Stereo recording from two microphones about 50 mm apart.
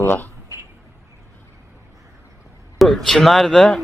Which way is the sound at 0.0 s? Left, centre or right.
Left.